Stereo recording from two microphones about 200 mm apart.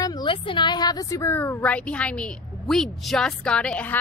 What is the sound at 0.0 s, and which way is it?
A woman's voice, 20° left (ahead or behind).